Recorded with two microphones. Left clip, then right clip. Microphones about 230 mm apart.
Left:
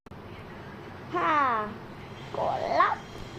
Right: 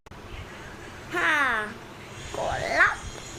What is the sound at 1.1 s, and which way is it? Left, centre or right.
Speech, centre.